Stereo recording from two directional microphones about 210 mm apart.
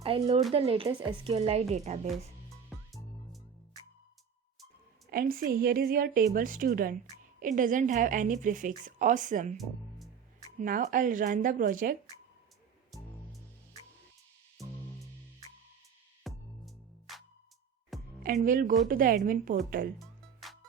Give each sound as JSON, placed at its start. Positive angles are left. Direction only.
{"t": 0.0, "sound": "speech", "side_deg": -30}
{"t": 2.6, "sound": "music", "side_deg": 0}
{"t": 5.1, "sound": "a woman's voice", "side_deg": -45}
{"t": 10.6, "sound": "a woman's voice", "side_deg": -40}
{"t": 14.6, "sound": "music", "side_deg": 0}
{"t": 16.2, "sound": "music", "side_deg": 0}
{"t": 18.4, "sound": "a woman's voice", "side_deg": -40}